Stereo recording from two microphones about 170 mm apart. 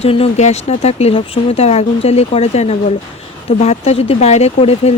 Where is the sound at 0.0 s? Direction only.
35° left (ahead or behind).